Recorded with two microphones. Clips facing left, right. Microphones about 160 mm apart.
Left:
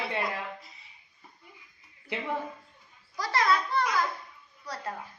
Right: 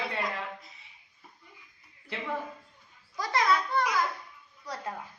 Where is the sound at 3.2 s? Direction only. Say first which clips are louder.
Even; 15° right (ahead or behind).